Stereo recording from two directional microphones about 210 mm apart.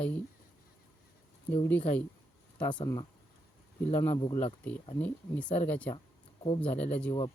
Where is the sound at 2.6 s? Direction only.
20° left (ahead or behind).